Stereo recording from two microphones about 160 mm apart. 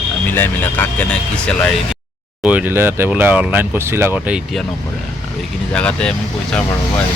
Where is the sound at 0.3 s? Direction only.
10° left (ahead or behind).